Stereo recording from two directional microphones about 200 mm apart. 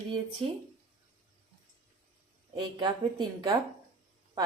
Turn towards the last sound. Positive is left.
turn(degrees=-25)  # may be behind; listen again after turning